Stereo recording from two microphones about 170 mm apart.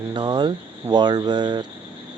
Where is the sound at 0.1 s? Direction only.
25° right (ahead or behind).